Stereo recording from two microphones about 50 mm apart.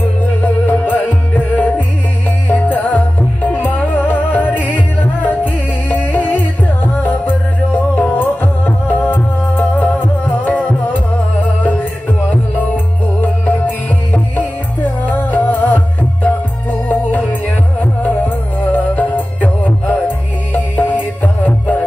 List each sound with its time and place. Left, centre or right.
0.2 s music: left
21.2 s music: left